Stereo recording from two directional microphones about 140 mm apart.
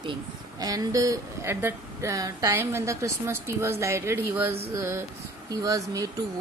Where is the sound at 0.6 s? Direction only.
25° right (ahead or behind).